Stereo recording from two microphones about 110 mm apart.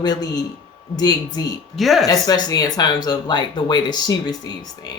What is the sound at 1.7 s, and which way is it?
Speech, centre (ahead or behind).